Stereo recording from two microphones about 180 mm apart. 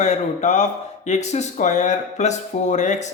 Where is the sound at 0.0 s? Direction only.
40° left (ahead or behind).